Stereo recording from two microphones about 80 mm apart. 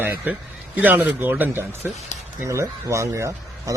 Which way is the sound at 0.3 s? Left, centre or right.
Right.